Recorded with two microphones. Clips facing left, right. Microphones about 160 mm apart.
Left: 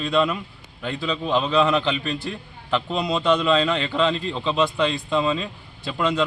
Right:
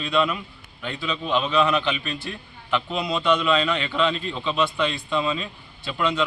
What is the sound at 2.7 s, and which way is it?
A man's voice, 35° left (ahead or behind).